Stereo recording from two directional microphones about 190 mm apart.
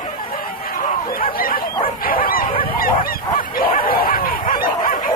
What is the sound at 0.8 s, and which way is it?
Bow-wow, 50° left (ahead or behind).